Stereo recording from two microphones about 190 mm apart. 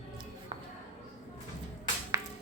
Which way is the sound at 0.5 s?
30° right (ahead or behind).